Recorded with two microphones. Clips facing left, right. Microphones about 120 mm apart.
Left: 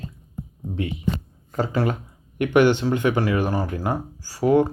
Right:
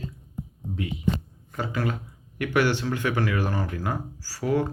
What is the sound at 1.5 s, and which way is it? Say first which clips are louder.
Speech: left 6 dB; 35° left (ahead or behind).